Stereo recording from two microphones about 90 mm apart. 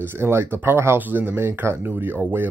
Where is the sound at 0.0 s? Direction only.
25° right (ahead or behind).